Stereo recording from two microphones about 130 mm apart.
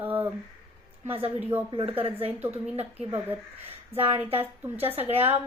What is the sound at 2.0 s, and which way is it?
Speech, 50° right (ahead or behind).